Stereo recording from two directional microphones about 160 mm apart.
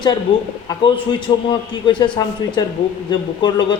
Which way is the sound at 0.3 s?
30° left (ahead or behind).